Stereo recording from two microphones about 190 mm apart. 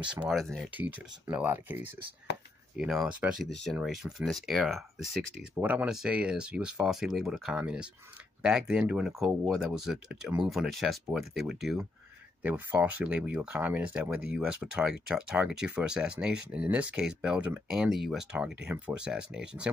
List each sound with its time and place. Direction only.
0.0 s speech: 5° right (ahead or behind)